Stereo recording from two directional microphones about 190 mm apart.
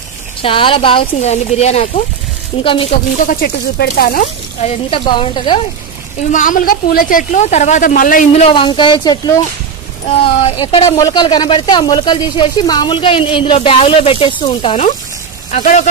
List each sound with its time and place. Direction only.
0.4 s speech: 30° left (ahead or behind)
3.3 s speech: 55° left (ahead or behind); by 5.6 s 25° left (ahead or behind)
6.3 s speech: 45° left (ahead or behind)